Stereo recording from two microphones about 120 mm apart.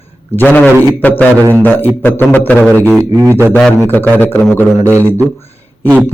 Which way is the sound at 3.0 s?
25° right (ahead or behind).